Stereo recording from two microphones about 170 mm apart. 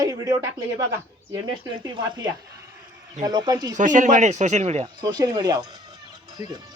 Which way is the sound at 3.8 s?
50° right (ahead or behind).